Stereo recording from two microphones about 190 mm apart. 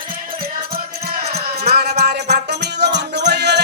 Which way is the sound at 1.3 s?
55° right (ahead or behind).